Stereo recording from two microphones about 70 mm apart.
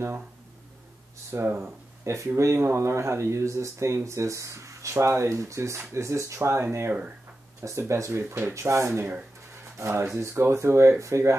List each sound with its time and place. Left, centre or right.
1.3 s speech: right